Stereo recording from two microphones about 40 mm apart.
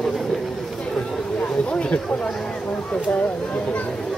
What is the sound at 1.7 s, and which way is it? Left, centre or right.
Chatter, left.